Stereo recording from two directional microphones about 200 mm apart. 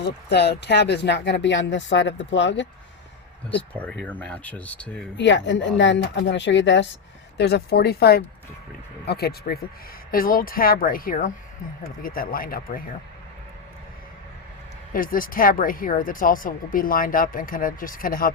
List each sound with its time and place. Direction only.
0.0 s speech: 55° left (ahead or behind)
3.8 s speech: 5° left (ahead or behind)
5.1 s speech: 65° left (ahead or behind)
7.3 s speech: 55° left (ahead or behind)
14.9 s speech: 45° left (ahead or behind)